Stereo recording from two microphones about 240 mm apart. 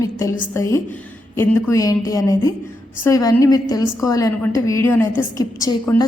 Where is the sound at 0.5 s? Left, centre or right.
Centre.